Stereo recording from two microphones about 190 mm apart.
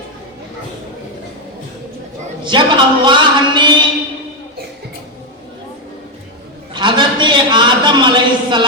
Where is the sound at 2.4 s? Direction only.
25° right (ahead or behind).